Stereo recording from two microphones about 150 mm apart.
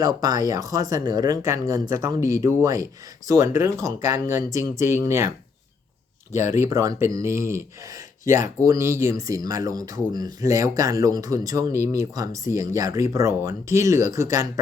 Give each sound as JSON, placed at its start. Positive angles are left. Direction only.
{"t": 0.0, "sound": "speech", "side_deg": -25}
{"t": 6.3, "sound": "speech", "side_deg": -20}
{"t": 8.2, "sound": "speech", "side_deg": 60}
{"t": 8.6, "sound": "speech", "side_deg": -20}